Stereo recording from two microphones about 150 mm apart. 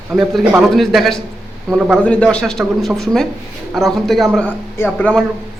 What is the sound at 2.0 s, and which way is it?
A man's voice, 10° left (ahead or behind).